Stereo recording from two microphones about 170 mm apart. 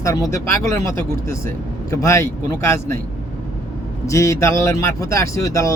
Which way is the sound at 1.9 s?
15° left (ahead or behind).